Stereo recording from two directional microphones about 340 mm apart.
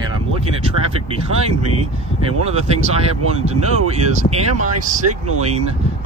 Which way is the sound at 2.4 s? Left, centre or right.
Centre.